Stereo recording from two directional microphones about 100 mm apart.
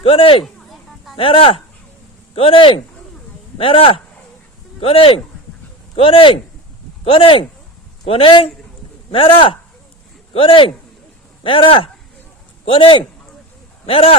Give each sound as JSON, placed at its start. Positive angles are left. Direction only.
{"t": 0.0, "sound": "speech", "side_deg": 65}
{"t": 0.4, "sound": "a sound", "side_deg": 0}
{"t": 1.1, "sound": "speech", "side_deg": 65}
{"t": 13.8, "sound": "speech", "side_deg": 70}